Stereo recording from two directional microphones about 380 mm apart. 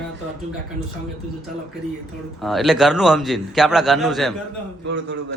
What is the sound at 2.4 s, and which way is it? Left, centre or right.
Speech, centre.